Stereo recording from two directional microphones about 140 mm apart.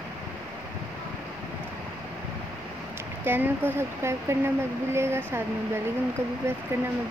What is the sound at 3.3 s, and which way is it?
Speech, 15° right (ahead or behind).